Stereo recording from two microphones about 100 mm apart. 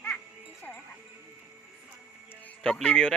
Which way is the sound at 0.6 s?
15° left (ahead or behind).